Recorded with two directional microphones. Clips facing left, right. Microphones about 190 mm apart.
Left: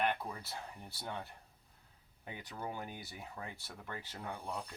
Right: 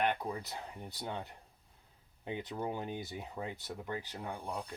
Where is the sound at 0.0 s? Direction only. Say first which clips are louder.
Right 2 dB; 15° right (ahead or behind).